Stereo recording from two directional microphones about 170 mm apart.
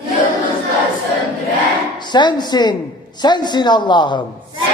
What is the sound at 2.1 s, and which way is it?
A man's voice, 25° left (ahead or behind).